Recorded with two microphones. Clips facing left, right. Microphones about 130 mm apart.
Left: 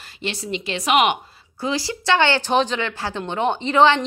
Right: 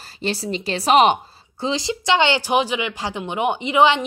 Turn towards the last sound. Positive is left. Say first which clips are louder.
# even
turn(degrees=-15)  # may be behind; listen again after turning